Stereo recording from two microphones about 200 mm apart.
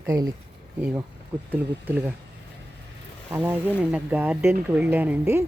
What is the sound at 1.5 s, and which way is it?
Speech, 10° right (ahead or behind).